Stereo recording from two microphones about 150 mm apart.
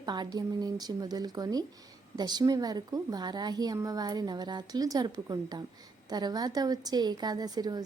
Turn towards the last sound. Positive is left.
turn(degrees=-25)  # may be behind; listen again after turning